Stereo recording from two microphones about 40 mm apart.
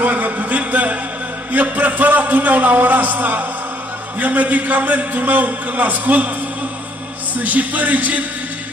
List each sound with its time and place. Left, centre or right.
0.0 s a sound: right
1.5 s a man's voice: right
7.3 s a man's voice: right